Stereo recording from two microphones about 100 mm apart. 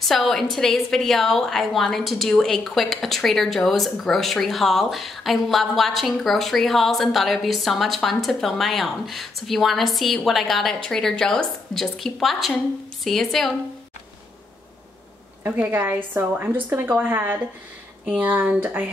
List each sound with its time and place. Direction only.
0.0 s a woman's voice: centre (ahead or behind)
15.4 s a woman's voice: 20° right (ahead or behind)